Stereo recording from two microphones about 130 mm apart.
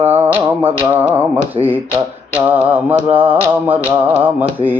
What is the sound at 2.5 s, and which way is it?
Mantra, 15° right (ahead or behind).